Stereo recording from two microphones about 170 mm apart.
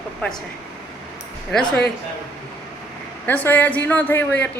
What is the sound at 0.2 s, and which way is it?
Speech, 5° left (ahead or behind).